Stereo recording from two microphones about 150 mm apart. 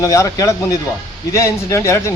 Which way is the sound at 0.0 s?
20° left (ahead or behind).